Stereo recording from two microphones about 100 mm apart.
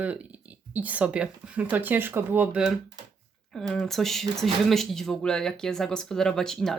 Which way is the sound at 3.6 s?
5° left (ahead or behind).